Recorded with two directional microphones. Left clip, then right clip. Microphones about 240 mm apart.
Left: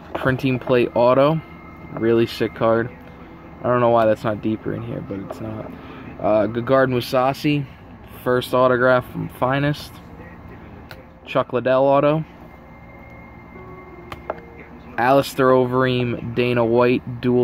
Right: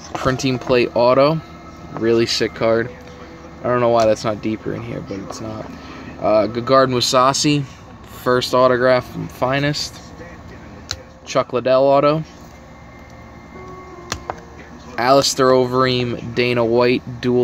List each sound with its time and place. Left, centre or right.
0.2 s speech: centre
6.2 s speech: centre
11.3 s speech: centre
15.0 s speech: centre